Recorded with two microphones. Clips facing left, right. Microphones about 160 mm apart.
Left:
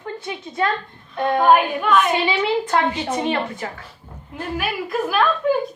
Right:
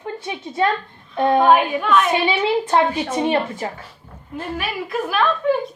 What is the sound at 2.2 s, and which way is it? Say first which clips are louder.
A woman's voice: right 1 dB; 20° right (ahead or behind).